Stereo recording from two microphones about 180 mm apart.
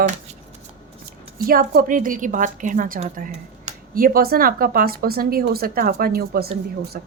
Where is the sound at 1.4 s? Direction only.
55° right (ahead or behind).